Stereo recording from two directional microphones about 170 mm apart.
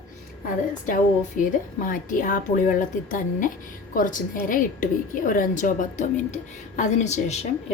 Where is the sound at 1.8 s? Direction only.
50° left (ahead or behind).